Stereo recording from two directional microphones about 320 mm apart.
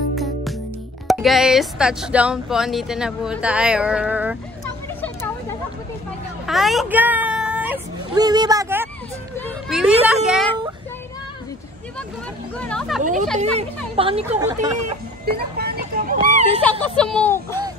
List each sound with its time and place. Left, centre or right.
0.2 s music: centre
1.0 s speech: centre
6.4 s a sound: centre
10.0 s speech: centre
12.5 s speech: centre
13.0 s speech: right
15.2 s a sound: right
17.0 s speech: centre